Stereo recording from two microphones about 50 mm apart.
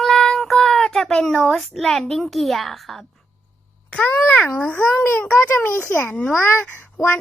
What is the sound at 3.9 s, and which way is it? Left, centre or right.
A child's voice, left.